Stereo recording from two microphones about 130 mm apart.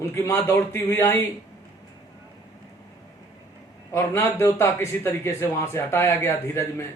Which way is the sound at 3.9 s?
20° left (ahead or behind).